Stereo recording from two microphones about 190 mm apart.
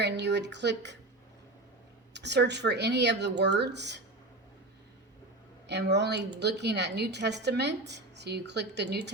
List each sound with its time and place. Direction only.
0.0 s a sound: 65° right (ahead or behind)
2.1 s a woman's voice: 65° right (ahead or behind)
5.6 s a woman's voice: 65° right (ahead or behind)